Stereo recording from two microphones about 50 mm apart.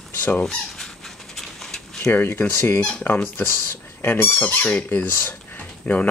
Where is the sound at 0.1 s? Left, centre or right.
Left.